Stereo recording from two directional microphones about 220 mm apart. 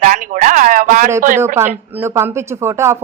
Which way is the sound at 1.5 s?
10° right (ahead or behind).